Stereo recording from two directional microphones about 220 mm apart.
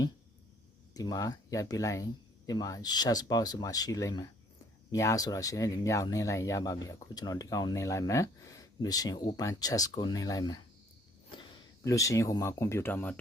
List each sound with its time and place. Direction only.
0.9 s speech: 15° left (ahead or behind)